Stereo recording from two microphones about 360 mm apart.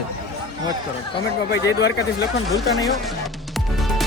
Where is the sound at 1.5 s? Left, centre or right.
Left.